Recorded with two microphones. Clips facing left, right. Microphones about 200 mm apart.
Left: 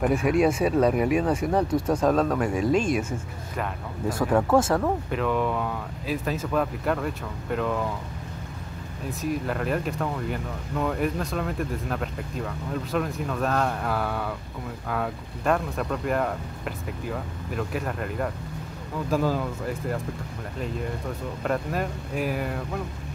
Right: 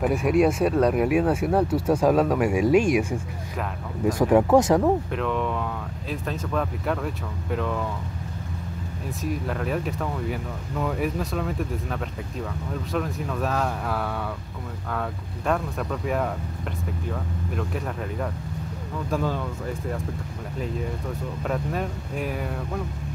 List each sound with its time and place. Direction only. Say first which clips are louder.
0.0 s speech: right 1 dB; centre (ahead or behind); by 4.9 s 15° right (ahead or behind)
5.1 s speech: left 1 dB; centre (ahead or behind)
9.2 s speech: left 1 dB; centre (ahead or behind)
21.5 s speech: left 1 dB; centre (ahead or behind)